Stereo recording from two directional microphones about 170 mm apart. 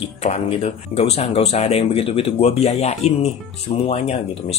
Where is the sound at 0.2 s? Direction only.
40° left (ahead or behind).